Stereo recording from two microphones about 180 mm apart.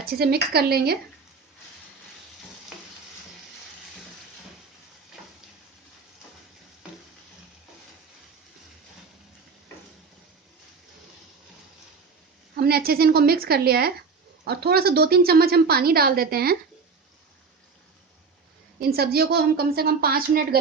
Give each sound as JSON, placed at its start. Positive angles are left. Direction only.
{"t": 0.0, "sound": "a woman's voice", "side_deg": -60}
{"t": 2.7, "sound": "stir", "side_deg": 0}
{"t": 12.5, "sound": "a woman's voice", "side_deg": -60}
{"t": 18.8, "sound": "a woman's voice", "side_deg": -60}